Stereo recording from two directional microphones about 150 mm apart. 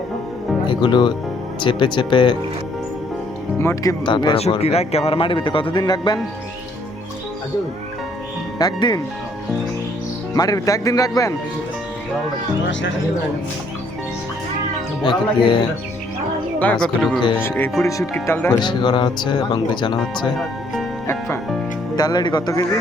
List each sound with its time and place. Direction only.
0.7 s speech: 30° left (ahead or behind)
3.6 s speech: 15° left (ahead or behind)
4.0 s speech: 30° left (ahead or behind)
4.4 s speech: 45° left (ahead or behind); by 6.1 s 25° left (ahead or behind)
8.5 s speech: 25° left (ahead or behind)
10.3 s speech: 25° left (ahead or behind)
15.0 s speech: 35° left (ahead or behind)
16.6 s speech: 10° left (ahead or behind)
17.8 s speech: 20° left (ahead or behind)
18.6 s speech: 30° left (ahead or behind)
20.3 s music: centre (ahead or behind)
21.9 s speech: 25° left (ahead or behind)